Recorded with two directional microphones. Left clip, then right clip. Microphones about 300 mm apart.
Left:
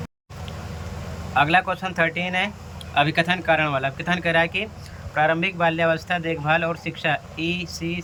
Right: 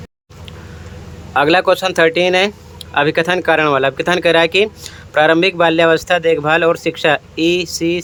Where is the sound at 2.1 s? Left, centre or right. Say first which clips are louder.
Right 11 dB; centre.